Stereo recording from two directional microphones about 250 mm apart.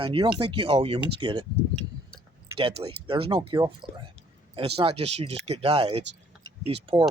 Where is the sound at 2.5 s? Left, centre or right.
Right.